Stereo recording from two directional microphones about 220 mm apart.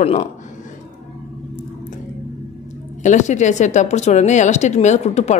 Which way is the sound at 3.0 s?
35° left (ahead or behind).